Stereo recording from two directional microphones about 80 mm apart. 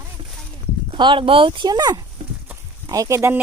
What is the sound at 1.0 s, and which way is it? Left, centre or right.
Speech, right.